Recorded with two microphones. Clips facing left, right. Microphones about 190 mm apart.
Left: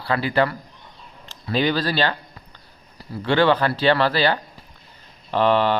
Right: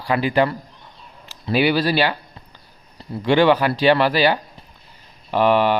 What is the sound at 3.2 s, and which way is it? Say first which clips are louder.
Speech: right 3 dB; 15° right (ahead or behind).